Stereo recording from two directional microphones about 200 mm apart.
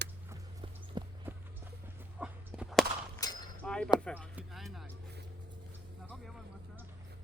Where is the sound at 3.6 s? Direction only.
5° left (ahead or behind).